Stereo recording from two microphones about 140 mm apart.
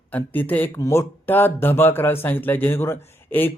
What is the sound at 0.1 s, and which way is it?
Speech, 15° left (ahead or behind).